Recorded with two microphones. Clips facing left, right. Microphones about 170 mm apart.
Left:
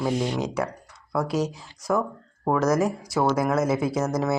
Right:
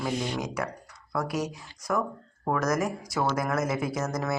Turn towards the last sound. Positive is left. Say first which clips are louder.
# left 5 dB
turn(degrees=25)  # may be behind; listen again after turning